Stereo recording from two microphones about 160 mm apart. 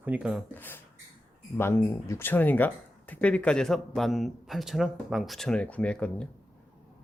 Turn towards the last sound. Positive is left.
turn(degrees=5)  # may be behind; listen again after turning